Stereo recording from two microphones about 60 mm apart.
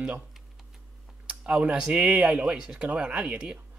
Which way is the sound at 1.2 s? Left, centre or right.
Centre.